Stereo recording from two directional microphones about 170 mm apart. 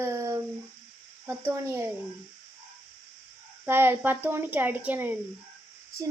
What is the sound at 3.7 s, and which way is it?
A woman's voice, 15° right (ahead or behind).